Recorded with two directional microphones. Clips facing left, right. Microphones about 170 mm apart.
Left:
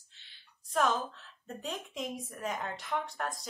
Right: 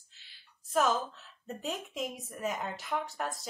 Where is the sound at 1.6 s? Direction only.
5° right (ahead or behind).